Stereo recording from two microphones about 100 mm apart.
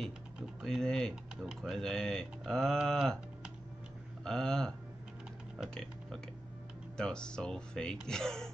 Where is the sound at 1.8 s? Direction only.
5° left (ahead or behind).